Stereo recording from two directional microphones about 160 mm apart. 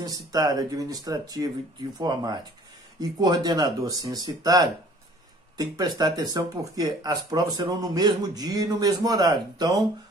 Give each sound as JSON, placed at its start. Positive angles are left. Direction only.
{"t": 0.0, "sound": "speech", "side_deg": -25}